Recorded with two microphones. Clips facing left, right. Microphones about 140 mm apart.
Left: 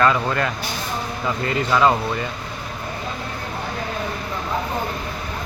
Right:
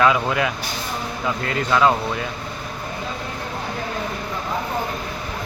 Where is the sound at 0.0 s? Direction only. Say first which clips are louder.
Right 1 dB; 5° right (ahead or behind).